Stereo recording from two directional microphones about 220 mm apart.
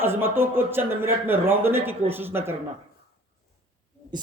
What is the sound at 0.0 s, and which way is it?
A man's voice, 10° right (ahead or behind).